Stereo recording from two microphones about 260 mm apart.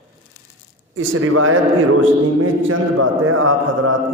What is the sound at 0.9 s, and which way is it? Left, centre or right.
A man's voice, right.